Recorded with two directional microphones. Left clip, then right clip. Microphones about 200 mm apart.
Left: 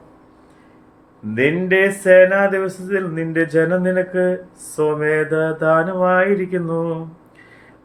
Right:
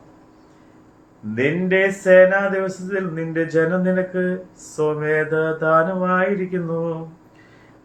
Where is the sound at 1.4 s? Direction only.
45° left (ahead or behind).